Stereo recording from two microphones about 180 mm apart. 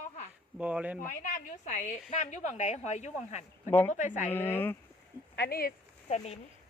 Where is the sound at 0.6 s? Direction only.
10° right (ahead or behind).